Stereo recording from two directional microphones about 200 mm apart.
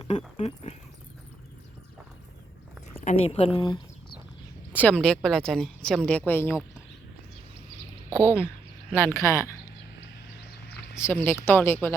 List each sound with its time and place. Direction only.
0.0 s speech: 30° left (ahead or behind)
3.0 s speech: 30° left (ahead or behind)
4.7 s speech: 5° left (ahead or behind)
8.2 s speech: 10° left (ahead or behind)
11.0 s speech: 10° left (ahead or behind)